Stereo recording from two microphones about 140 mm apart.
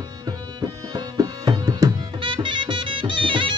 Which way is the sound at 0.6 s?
30° right (ahead or behind).